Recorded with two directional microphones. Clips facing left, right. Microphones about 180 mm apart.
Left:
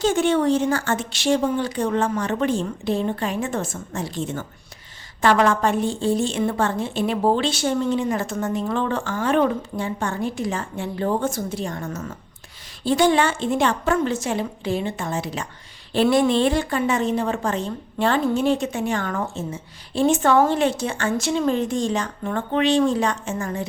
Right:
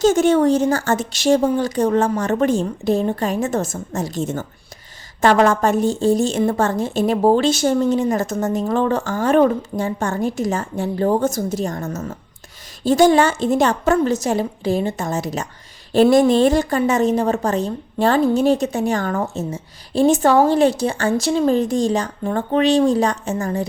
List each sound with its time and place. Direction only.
0.0 s a woman's voice: 40° right (ahead or behind)